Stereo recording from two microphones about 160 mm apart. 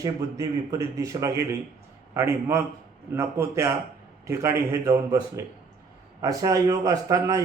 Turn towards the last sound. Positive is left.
turn(degrees=-20)  # may be behind; listen again after turning